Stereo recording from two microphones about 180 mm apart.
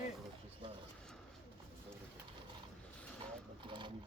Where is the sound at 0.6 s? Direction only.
25° right (ahead or behind).